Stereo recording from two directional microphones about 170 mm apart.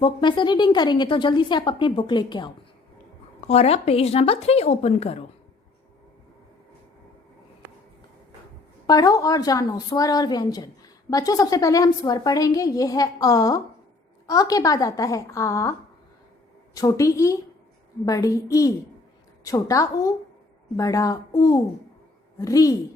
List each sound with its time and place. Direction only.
0.0 s a woman's voice: 25° left (ahead or behind)
3.4 s a woman's voice: 40° left (ahead or behind)
8.9 s a woman's voice: 20° left (ahead or behind)
16.7 s a woman's voice: 20° left (ahead or behind)